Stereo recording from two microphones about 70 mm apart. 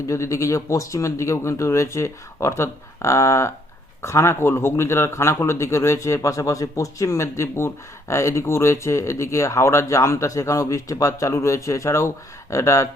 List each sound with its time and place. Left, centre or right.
0.1 s speech: left